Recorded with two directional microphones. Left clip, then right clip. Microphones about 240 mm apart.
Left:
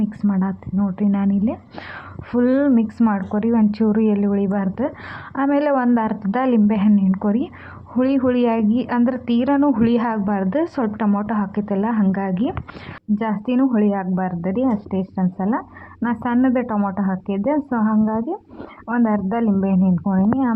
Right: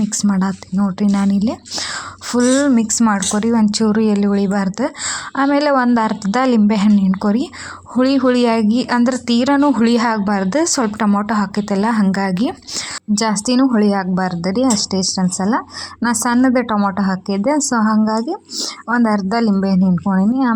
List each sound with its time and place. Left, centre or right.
0.2 s a woman's voice: right